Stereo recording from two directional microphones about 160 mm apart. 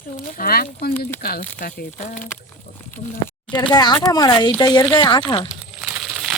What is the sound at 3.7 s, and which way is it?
Speech, 25° left (ahead or behind).